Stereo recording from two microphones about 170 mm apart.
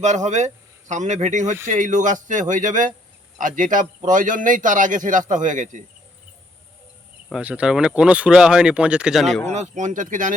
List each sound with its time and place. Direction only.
0.0 s a man's voice: 45° right (ahead or behind)
7.3 s speech: 5° right (ahead or behind)
9.5 s a man's voice: 45° right (ahead or behind)